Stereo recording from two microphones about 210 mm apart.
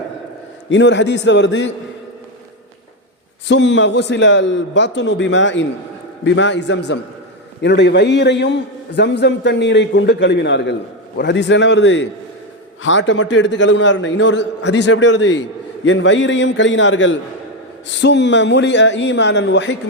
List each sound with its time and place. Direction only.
0.7 s a man's voice: 60° left (ahead or behind)
3.5 s a man's voice: 60° left (ahead or behind)